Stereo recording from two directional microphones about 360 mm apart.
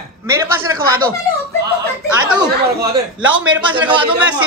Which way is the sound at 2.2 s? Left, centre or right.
Centre.